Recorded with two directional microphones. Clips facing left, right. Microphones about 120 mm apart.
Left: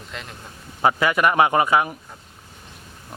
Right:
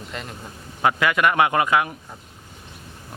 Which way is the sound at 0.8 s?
25° left (ahead or behind).